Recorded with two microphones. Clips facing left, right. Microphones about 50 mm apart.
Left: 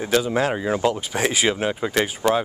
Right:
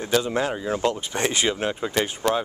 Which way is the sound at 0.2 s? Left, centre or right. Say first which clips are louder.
Left 3 dB; centre.